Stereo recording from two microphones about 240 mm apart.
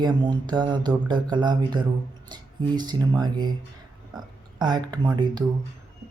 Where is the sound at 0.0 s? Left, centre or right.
Centre.